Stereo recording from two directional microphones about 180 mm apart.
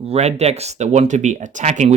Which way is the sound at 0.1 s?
35° right (ahead or behind).